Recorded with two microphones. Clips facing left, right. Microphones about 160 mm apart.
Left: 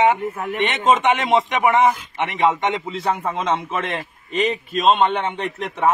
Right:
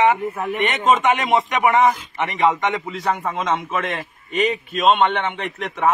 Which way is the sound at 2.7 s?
25° left (ahead or behind).